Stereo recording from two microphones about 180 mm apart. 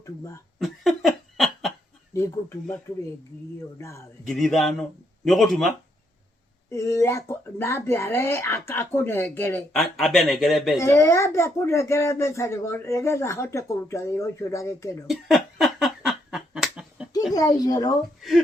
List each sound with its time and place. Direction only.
0.6 s laughter: centre (ahead or behind)
2.1 s a sound: 15° left (ahead or behind)
3.8 s speech: 15° left (ahead or behind)
4.3 s speech: centre (ahead or behind)
6.7 s speech: 15° left (ahead or behind)
9.7 s speech: centre (ahead or behind)
10.8 s speech: 15° left (ahead or behind)
15.0 s a sound: centre (ahead or behind)
17.3 s speech: 20° left (ahead or behind)
18.2 s speech: centre (ahead or behind)